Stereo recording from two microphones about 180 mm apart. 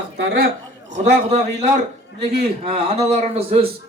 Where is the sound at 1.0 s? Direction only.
40° right (ahead or behind).